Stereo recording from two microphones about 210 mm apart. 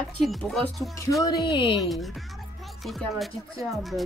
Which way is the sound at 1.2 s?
20° left (ahead or behind).